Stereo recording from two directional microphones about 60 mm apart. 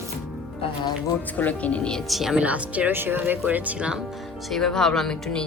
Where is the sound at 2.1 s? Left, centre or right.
Centre.